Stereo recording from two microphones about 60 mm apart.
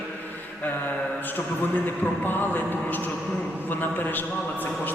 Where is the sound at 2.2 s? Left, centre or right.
Left.